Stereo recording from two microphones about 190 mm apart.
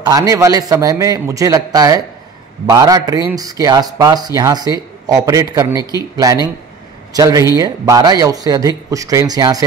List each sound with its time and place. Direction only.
0.0 s a man's voice: 20° right (ahead or behind)